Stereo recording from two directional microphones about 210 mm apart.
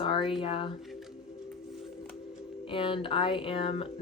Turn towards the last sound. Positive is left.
turn(degrees=25)  # may be behind; listen again after turning